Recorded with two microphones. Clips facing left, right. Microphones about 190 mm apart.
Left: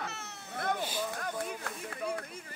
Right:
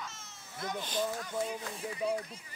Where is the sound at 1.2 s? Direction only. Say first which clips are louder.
Right 1 dB; 60° left (ahead or behind).